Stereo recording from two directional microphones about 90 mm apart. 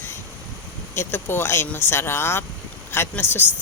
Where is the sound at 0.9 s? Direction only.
25° left (ahead or behind).